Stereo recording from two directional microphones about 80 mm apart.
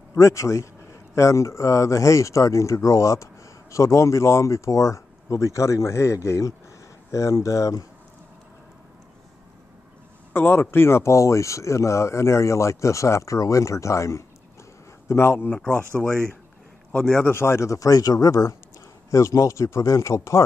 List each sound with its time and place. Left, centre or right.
0.1 s speech: left
10.3 s speech: left
15.5 s speech: centre
16.9 s a man's voice: centre
17.3 s speech: left